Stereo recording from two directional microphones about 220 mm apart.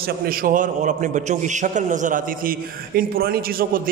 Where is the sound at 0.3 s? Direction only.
40° right (ahead or behind).